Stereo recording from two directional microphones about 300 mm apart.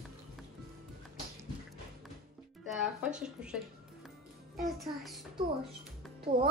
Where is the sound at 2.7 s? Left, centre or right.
Centre.